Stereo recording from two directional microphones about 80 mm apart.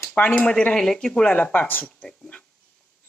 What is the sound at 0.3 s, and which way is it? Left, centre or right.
Speech, centre.